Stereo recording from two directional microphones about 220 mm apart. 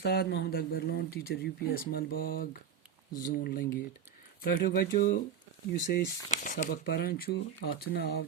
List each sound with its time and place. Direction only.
0.0 s speech: 50° left (ahead or behind)